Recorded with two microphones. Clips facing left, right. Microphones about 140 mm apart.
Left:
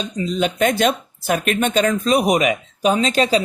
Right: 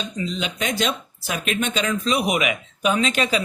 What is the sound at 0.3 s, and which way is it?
Speech, 45° left (ahead or behind).